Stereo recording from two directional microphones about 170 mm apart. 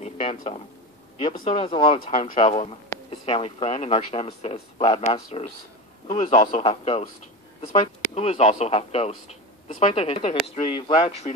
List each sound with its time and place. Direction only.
0.0 s a man's voice: 35° left (ahead or behind)